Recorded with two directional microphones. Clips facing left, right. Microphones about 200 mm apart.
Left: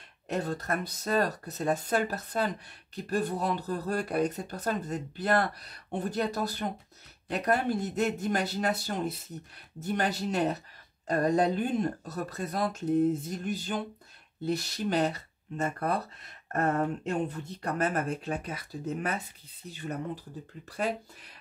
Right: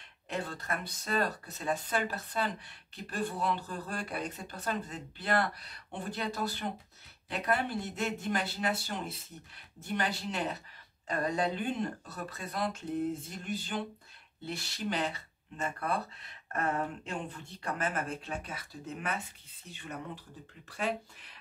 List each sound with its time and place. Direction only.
0.3 s speech: 40° left (ahead or behind)